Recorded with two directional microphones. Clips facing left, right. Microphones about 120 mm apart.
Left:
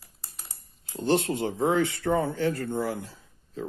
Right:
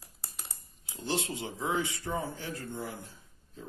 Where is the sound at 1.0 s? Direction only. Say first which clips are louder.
Left 9 dB; 55° left (ahead or behind).